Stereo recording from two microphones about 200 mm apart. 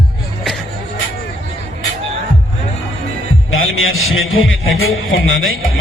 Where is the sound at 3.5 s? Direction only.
90° left.